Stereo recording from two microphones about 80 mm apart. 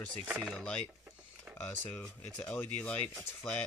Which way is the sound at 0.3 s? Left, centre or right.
Centre.